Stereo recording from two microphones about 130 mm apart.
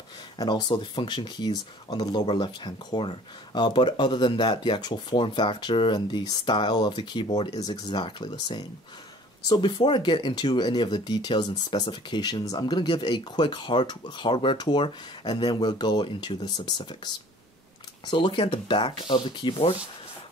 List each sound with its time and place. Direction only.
0.4 s speech: 35° left (ahead or behind)